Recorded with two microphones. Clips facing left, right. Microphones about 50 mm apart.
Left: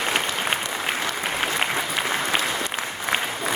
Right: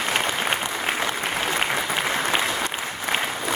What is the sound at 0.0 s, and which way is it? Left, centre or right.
Applause, centre.